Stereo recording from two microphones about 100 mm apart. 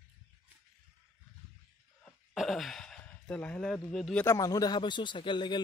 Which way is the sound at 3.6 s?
5° left (ahead or behind).